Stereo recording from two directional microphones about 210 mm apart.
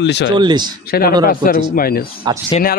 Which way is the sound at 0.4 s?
20° right (ahead or behind).